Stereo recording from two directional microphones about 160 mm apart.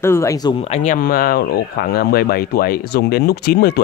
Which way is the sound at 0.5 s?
40° left (ahead or behind).